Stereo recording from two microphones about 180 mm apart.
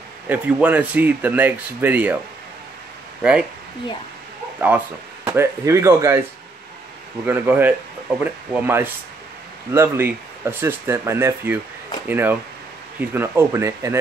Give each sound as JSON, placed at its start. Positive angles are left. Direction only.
{"t": 0.3, "sound": "speech", "side_deg": -10}
{"t": 3.2, "sound": "speech", "side_deg": -5}
{"t": 4.6, "sound": "speech", "side_deg": -10}
{"t": 7.2, "sound": "speech", "side_deg": -10}